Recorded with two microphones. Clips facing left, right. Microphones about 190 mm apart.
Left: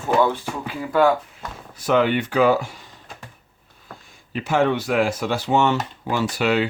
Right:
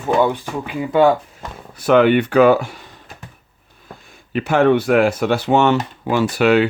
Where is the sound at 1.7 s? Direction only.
65° right (ahead or behind).